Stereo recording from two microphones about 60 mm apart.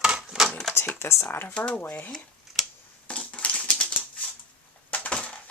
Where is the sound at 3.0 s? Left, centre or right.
Centre.